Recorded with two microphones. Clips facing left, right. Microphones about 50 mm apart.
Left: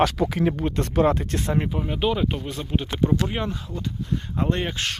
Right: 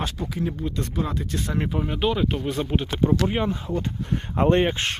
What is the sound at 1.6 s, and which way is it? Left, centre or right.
Speech, centre.